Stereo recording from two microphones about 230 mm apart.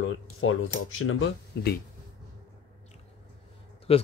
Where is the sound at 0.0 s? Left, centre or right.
Left.